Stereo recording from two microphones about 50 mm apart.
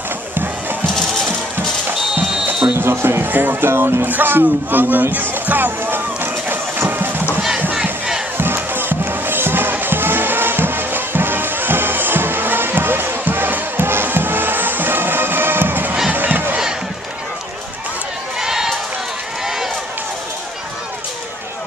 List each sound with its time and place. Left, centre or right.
0.3 s music: right
2.8 s speech: right
5.1 s music: right
8.5 s music: right
16.1 s battle cry: right
18.4 s a sound: centre
19.4 s run: centre